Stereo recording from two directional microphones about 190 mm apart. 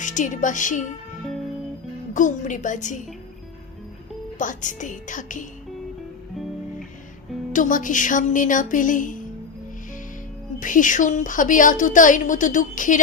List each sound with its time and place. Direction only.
0.0 s a woman's voice: 40° left (ahead or behind)
2.1 s a woman's voice: 40° left (ahead or behind)
4.4 s a woman's voice: 40° left (ahead or behind)
6.3 s music: centre (ahead or behind)
7.5 s a woman's voice: 45° left (ahead or behind)
10.6 s a woman's voice: 45° left (ahead or behind)